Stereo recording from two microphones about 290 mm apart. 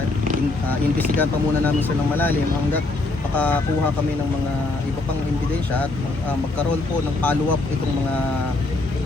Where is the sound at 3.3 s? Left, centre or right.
Centre.